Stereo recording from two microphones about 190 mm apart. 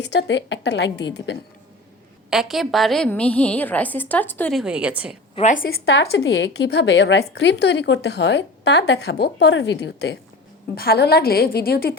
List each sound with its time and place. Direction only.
0.0 s a woman's voice: 65° left (ahead or behind)
2.3 s a woman's voice: centre (ahead or behind)
5.3 s a woman's voice: 35° left (ahead or behind)
5.7 s a woman's voice: 65° left (ahead or behind)